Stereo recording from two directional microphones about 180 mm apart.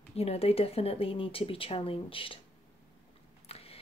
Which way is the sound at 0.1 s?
35° left (ahead or behind).